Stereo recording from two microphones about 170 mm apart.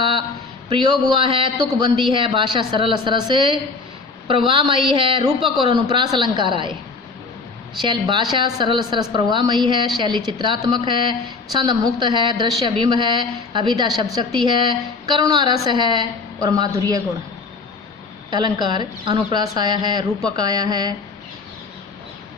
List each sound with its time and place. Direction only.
0.0 s a sound: 30° right (ahead or behind)
0.7 s a woman's voice: 25° right (ahead or behind)
7.8 s a woman's voice: 30° right (ahead or behind)
18.3 s a woman's voice: 25° right (ahead or behind)